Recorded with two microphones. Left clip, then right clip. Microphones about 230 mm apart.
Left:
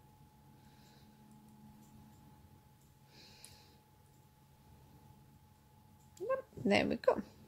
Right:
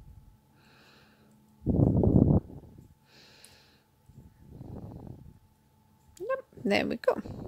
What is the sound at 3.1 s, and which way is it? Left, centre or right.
Snort, right.